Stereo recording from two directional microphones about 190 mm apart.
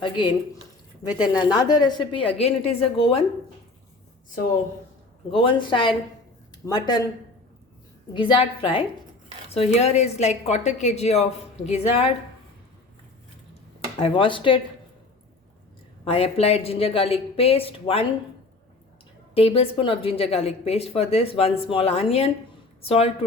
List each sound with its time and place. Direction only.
0.0 s a woman's voice: 25° left (ahead or behind)
5.3 s a woman's voice: 25° left (ahead or behind)
8.1 s a woman's voice: 25° left (ahead or behind)
14.0 s a woman's voice: 25° left (ahead or behind)
16.0 s a woman's voice: 30° left (ahead or behind)
19.3 s a woman's voice: 30° left (ahead or behind)